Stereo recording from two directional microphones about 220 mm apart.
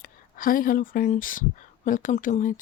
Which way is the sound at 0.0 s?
40° left (ahead or behind).